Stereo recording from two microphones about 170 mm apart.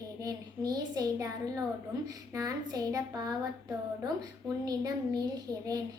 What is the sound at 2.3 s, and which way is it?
A child's voice, 20° right (ahead or behind).